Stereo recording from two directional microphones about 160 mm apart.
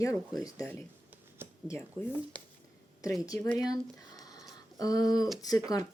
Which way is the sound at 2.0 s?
35° right (ahead or behind).